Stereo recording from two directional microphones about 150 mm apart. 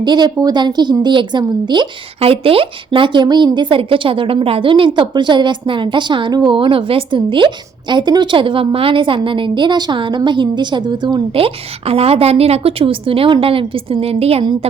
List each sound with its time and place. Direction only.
0.0 s a woman's voice: 30° right (ahead or behind)